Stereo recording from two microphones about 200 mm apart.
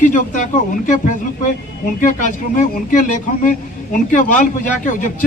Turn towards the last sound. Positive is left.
turn(degrees=40)  # may be behind; listen again after turning